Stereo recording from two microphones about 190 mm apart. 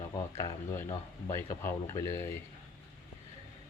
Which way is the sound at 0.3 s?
15° left (ahead or behind).